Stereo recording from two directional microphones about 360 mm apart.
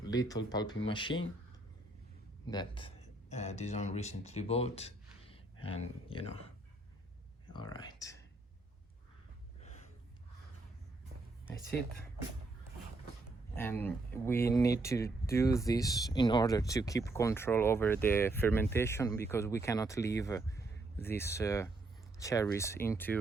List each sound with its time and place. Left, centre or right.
0.0 s speech: centre
2.5 s speech: centre
7.5 s speech: centre
9.6 s gasp: centre
13.6 s speech: centre